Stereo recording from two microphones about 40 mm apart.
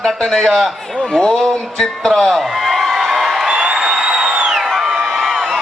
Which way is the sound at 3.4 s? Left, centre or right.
Centre.